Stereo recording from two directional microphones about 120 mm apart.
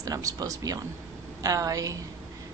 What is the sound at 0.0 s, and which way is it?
A woman's voice, 30° right (ahead or behind).